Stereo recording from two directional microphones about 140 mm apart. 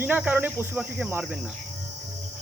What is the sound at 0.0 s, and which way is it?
Speech, 10° right (ahead or behind).